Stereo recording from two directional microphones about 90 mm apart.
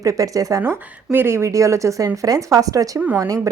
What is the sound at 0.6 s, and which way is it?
Speech, 25° right (ahead or behind).